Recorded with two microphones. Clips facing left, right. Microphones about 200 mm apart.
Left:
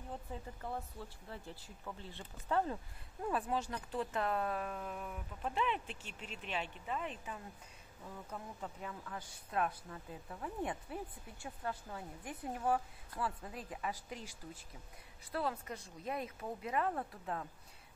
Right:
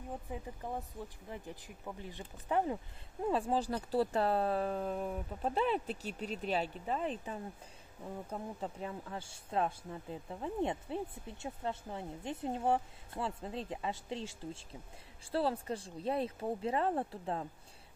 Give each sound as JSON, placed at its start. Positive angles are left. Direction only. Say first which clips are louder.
{"t": 0.1, "sound": "speech", "louder": "right 3 dB", "side_deg": -15}
{"t": 3.3, "sound": "speech", "louder": "right 5 dB", "side_deg": -30}